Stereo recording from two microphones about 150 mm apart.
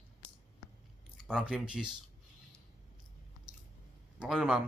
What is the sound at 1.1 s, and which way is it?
Speech, centre (ahead or behind).